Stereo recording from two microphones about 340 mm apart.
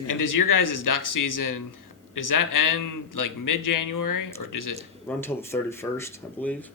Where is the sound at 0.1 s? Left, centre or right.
Left.